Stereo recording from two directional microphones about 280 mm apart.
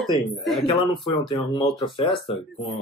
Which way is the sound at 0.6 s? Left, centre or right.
Centre.